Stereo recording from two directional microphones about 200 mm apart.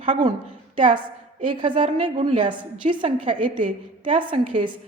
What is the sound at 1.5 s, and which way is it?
A woman's voice, 25° right (ahead or behind).